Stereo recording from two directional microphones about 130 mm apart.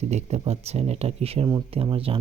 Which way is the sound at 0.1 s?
60° right (ahead or behind).